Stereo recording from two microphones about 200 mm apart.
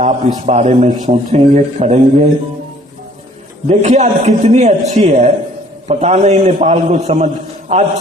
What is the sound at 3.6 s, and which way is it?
A man's voice, 35° right (ahead or behind).